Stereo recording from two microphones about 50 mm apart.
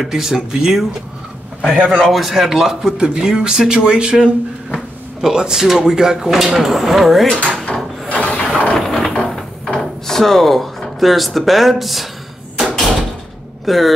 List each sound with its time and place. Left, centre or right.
0.0 s speech: centre
1.9 s a man's voice: centre
8.1 s wood: left
8.7 s a sound: centre
9.7 s speech: centre
12.5 s door: centre
13.7 s a man's voice: centre